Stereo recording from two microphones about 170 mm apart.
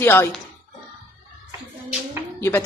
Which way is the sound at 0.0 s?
15° left (ahead or behind).